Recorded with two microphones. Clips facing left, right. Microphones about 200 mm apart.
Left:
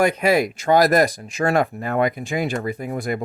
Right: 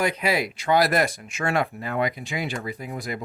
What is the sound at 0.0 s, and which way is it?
Speech, 50° left (ahead or behind).